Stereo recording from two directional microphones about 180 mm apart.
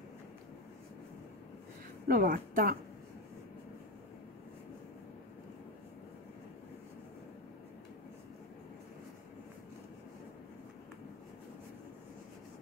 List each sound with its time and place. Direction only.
2.0 s speech: 50° right (ahead or behind)